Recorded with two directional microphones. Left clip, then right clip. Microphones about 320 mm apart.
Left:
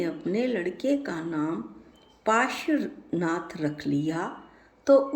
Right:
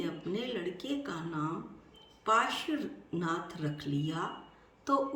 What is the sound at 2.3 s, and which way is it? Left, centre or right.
A woman's voice, centre.